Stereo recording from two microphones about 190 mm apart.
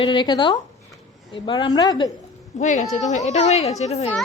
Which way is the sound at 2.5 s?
40° left (ahead or behind).